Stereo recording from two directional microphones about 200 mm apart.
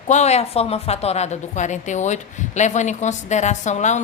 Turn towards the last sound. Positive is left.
turn(degrees=35)  # may be behind; listen again after turning